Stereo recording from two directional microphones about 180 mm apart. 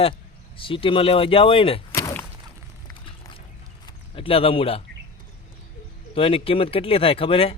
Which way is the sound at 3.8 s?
30° left (ahead or behind).